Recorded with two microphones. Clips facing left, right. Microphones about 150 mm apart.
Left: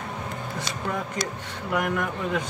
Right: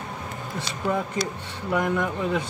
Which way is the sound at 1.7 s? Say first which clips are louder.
Right 2 dB; 25° right (ahead or behind).